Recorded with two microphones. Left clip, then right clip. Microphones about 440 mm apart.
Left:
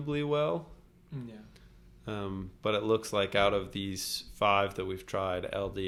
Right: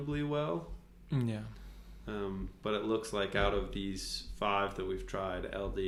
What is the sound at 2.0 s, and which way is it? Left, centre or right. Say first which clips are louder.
Speech: left 1 dB; centre.